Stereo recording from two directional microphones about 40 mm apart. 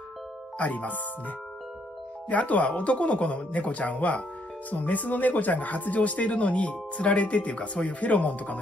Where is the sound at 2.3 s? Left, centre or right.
Left.